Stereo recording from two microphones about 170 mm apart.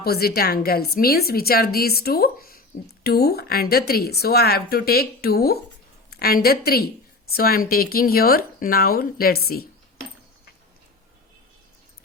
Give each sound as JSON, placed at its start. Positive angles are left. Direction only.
{"t": 0.0, "sound": "a woman's voice", "side_deg": 65}